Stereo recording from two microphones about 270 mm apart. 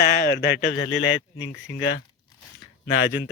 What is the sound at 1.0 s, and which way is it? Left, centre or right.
Speech, left.